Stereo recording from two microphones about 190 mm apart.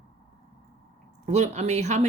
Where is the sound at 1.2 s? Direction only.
35° right (ahead or behind).